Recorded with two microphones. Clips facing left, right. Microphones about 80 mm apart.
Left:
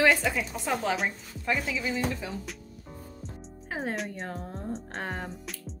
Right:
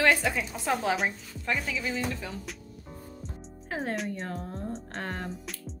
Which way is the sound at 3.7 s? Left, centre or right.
Centre.